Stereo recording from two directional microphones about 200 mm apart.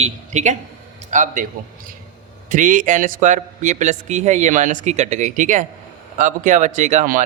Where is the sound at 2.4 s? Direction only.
40° right (ahead or behind).